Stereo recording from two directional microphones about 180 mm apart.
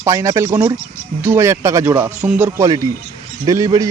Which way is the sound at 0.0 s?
15° right (ahead or behind).